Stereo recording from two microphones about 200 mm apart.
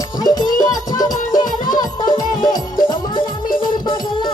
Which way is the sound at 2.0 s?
45° left (ahead or behind).